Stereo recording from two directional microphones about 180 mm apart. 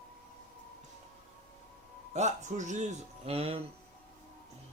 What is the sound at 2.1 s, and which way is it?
Speech, 40° right (ahead or behind).